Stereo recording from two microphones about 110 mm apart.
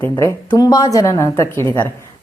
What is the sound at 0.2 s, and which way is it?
A woman's voice, 30° left (ahead or behind).